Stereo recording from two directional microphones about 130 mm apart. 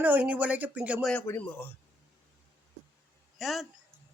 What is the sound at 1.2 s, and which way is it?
Speech, 15° left (ahead or behind).